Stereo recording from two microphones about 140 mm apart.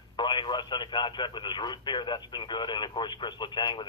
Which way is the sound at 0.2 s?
35° left (ahead or behind).